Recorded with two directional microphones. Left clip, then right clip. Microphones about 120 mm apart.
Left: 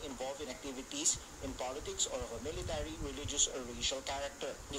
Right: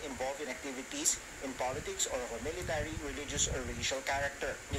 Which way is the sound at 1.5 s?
15° left (ahead or behind).